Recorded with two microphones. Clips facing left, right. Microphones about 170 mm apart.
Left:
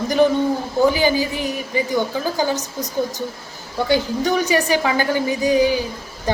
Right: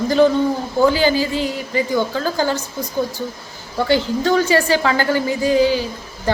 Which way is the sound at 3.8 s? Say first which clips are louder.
Right 2 dB; 15° left (ahead or behind).